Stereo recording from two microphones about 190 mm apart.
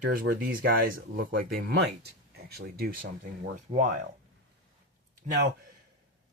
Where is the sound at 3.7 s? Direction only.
40° right (ahead or behind).